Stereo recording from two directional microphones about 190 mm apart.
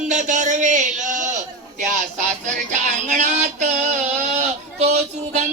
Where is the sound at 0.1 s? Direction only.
40° right (ahead or behind).